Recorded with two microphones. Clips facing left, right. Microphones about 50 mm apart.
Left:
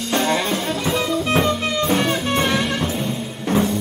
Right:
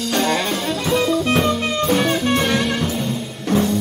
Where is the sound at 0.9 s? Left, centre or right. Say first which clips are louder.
Right 3 dB; centre.